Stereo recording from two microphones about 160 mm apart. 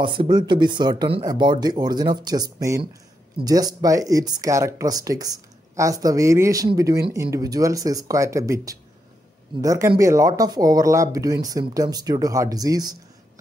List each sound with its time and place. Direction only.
0.0 s speech: 30° right (ahead or behind)